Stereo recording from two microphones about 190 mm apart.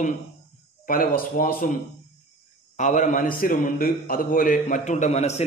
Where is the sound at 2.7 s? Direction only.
40° left (ahead or behind).